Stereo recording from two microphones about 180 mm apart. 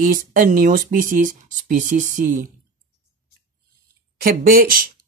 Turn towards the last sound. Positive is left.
turn(degrees=-55)  # may be behind; listen again after turning